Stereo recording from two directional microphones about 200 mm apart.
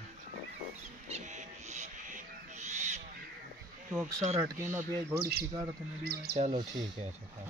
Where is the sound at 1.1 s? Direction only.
35° right (ahead or behind).